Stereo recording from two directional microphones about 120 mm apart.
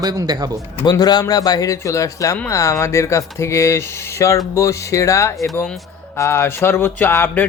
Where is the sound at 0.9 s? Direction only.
35° left (ahead or behind).